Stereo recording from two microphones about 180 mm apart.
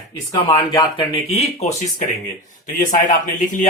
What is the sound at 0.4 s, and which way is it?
Speech, 25° left (ahead or behind).